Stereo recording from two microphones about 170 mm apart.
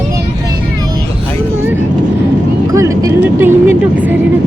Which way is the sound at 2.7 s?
20° right (ahead or behind).